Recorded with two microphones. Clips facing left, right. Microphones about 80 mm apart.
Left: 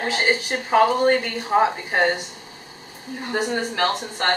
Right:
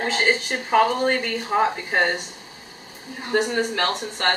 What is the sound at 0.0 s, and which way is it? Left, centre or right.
A woman's voice, centre.